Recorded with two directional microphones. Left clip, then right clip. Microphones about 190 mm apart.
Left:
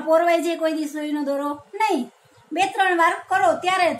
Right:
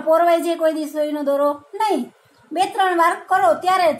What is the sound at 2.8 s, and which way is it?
Speech, 20° right (ahead or behind).